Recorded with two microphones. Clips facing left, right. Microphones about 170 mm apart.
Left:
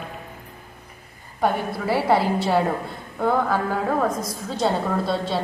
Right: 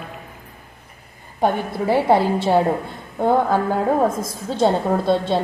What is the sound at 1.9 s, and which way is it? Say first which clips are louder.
Speech: right 3 dB; 20° right (ahead or behind).